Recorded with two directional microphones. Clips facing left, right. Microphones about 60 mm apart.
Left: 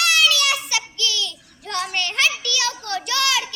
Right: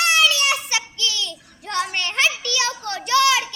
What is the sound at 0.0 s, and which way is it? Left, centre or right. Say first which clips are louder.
Child singing: right 1 dB; right.